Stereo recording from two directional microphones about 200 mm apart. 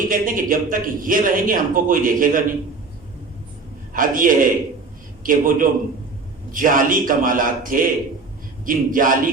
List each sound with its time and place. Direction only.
0.1 s a man's voice: 45° right (ahead or behind)
3.9 s a man's voice: 45° right (ahead or behind)